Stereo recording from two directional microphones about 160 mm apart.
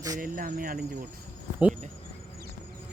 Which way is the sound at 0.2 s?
60° right (ahead or behind).